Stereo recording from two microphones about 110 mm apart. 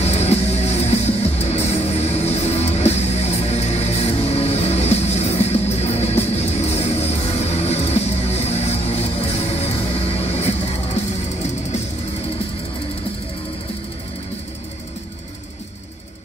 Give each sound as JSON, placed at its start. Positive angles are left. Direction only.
{"t": 0.0, "sound": "music", "side_deg": 75}